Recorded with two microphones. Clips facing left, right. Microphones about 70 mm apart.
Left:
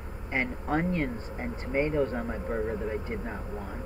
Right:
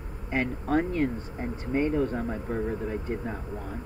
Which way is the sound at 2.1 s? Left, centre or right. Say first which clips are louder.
Right 1 dB; centre.